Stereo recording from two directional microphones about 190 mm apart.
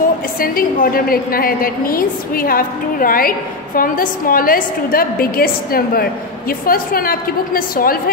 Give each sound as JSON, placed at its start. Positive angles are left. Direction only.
{"t": 0.4, "sound": "a woman's voice", "side_deg": 50}